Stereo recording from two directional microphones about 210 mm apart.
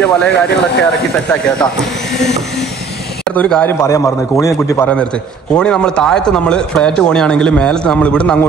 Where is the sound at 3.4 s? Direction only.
5° left (ahead or behind).